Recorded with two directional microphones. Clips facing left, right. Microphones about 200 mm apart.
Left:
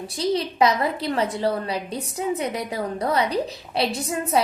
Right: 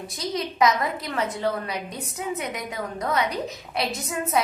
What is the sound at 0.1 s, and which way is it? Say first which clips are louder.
A child's voice: left 6 dB; 30° left (ahead or behind).